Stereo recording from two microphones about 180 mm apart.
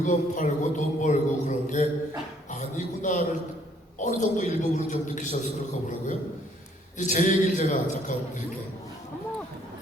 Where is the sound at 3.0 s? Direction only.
45° left (ahead or behind).